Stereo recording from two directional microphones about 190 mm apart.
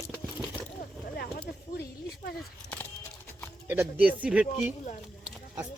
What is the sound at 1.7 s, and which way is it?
Speech, 55° left (ahead or behind).